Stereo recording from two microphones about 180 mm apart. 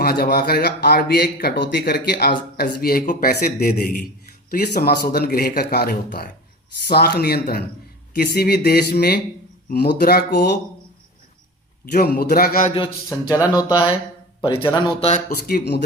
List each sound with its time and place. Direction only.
0.0 s speech: 60° left (ahead or behind)
11.9 s speech: 55° left (ahead or behind)
13.1 s speech: 20° left (ahead or behind)
14.7 s speech: 25° left (ahead or behind)
15.4 s speech: 55° left (ahead or behind)